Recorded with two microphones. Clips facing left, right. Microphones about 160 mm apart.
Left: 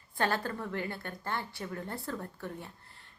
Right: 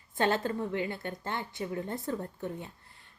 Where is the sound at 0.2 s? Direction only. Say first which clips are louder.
Right 3 dB; 20° right (ahead or behind).